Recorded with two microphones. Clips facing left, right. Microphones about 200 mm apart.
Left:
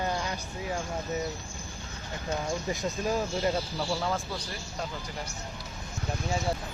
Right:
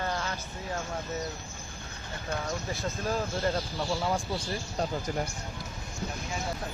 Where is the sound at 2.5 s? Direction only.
15° left (ahead or behind).